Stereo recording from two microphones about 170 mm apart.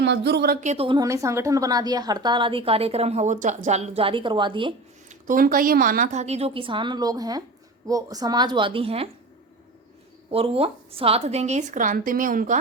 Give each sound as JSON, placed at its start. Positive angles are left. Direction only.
{"t": 0.0, "sound": "speech", "side_deg": -80}
{"t": 0.6, "sound": "a woman's voice", "side_deg": -40}
{"t": 0.9, "sound": "a woman's voice", "side_deg": -20}
{"t": 5.0, "sound": "a woman's voice", "side_deg": -50}
{"t": 10.3, "sound": "a woman's voice", "side_deg": -35}